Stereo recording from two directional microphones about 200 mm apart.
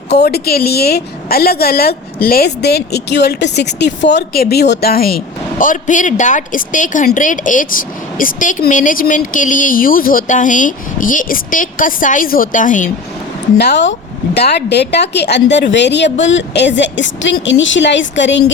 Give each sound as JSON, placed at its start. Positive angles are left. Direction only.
{"t": 0.1, "sound": "a woman's voice", "side_deg": 55}
{"t": 13.6, "sound": "a woman's voice", "side_deg": 60}